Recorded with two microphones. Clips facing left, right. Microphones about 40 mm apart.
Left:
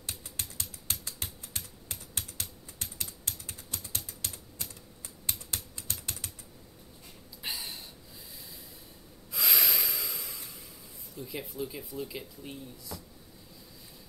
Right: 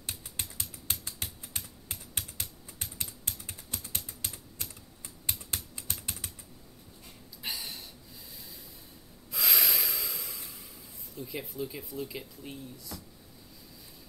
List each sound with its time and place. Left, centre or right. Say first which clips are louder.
0.4 s typing: right 1 dB; centre
5.5 s typing: even; centre
7.4 s a sound: even; centre
9.3 s snort: even; centre
11.1 s speech: even; centre